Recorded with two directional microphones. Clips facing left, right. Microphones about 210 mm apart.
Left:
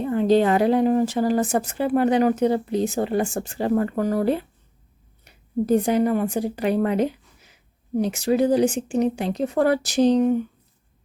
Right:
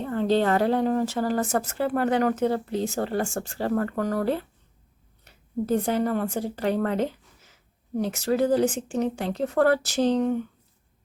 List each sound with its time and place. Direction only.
0.0 s a woman's voice: 15° left (ahead or behind)